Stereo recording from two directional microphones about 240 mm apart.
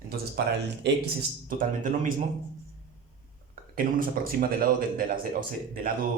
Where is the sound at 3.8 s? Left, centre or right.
Right.